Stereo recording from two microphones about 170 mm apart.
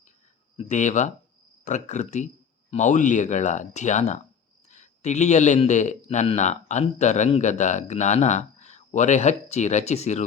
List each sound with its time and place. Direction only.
0.5 s speech: 45° left (ahead or behind)